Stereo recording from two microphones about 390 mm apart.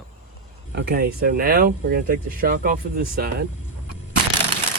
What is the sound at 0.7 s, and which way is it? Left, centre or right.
Speech, right.